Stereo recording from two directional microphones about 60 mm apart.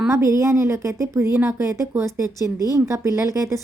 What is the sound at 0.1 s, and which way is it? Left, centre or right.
A woman's voice, right.